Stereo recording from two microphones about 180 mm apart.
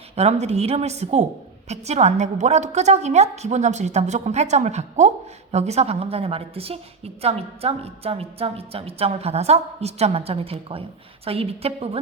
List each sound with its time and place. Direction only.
0.2 s a woman's voice: 35° right (ahead or behind)